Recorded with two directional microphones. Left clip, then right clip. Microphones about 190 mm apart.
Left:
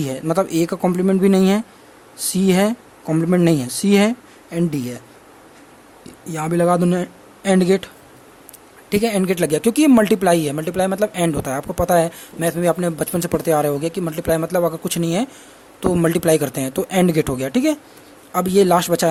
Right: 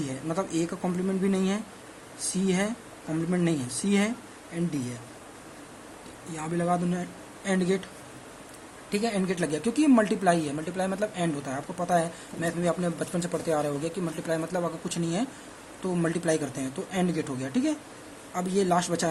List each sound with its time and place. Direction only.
0.0 s speech: 55° left (ahead or behind)
6.3 s speech: 55° left (ahead or behind)
8.9 s speech: 55° left (ahead or behind)